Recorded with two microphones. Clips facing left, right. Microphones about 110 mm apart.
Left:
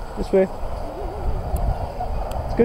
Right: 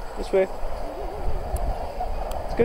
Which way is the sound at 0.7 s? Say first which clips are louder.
Left 2 dB; 30° left (ahead or behind).